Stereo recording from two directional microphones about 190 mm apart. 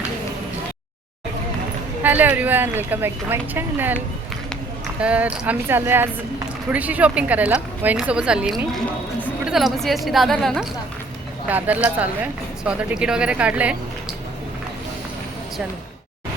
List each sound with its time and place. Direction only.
2.0 s a woman's voice: 10° right (ahead or behind)